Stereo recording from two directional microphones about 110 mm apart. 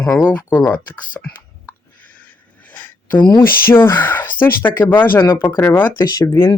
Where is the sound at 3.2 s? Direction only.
45° left (ahead or behind).